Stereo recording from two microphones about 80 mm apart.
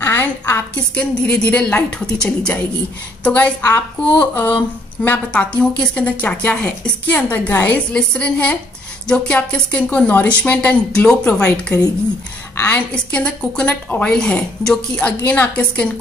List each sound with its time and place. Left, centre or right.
0.0 s a woman's voice: left
0.9 s a woman's voice: centre